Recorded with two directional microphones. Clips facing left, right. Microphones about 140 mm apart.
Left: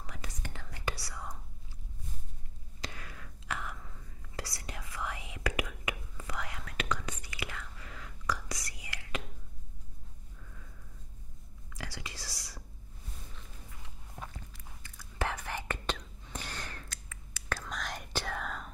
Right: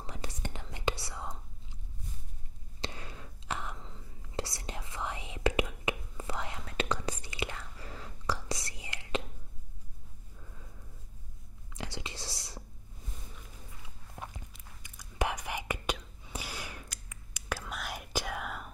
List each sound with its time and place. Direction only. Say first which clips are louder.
0.0 s whispering: right 4 dB; 30° right (ahead or behind)
2.8 s whispering: right 3 dB; 25° right (ahead or behind)
10.4 s sniff: right 1 dB; 20° right (ahead or behind)
11.7 s whispering: right 3 dB; 25° right (ahead or behind)
14.2 s whispering: right 1 dB; 15° right (ahead or behind)